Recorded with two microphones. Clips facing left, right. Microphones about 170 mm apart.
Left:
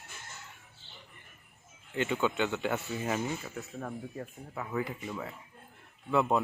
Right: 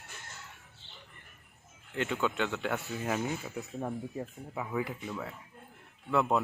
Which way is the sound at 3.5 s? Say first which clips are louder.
Right 3 dB; 15° right (ahead or behind).